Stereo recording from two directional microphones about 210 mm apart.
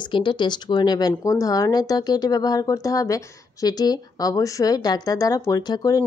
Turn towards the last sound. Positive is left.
turn(degrees=20)  # may be behind; listen again after turning